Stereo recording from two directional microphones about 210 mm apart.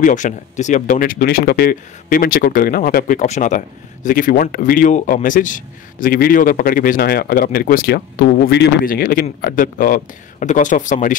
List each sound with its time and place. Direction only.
0.0 s speech: 35° left (ahead or behind)